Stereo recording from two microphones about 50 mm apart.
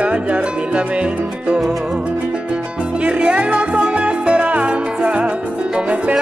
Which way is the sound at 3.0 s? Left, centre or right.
Right.